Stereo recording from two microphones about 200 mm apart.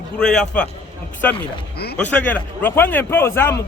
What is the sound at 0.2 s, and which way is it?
A man's voice, 5° left (ahead or behind).